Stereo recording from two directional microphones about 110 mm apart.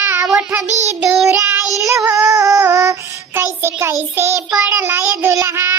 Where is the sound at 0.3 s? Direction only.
5° right (ahead or behind).